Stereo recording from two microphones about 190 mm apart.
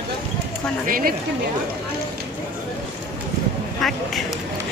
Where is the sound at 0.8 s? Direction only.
50° right (ahead or behind).